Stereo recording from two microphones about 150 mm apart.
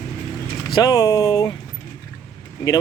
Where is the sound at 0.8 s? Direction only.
25° left (ahead or behind).